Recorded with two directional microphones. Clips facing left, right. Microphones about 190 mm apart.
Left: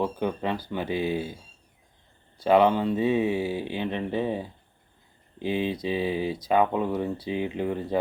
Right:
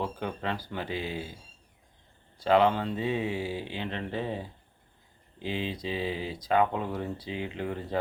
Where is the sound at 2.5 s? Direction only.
15° left (ahead or behind).